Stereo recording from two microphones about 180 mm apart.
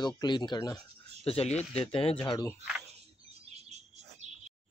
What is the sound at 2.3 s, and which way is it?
Speech, 20° left (ahead or behind).